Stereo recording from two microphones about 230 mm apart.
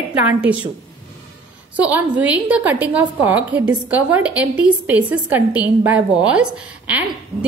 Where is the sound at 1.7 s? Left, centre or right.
Centre.